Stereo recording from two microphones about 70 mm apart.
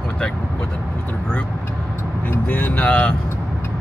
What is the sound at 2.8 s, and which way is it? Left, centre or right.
Speech, centre.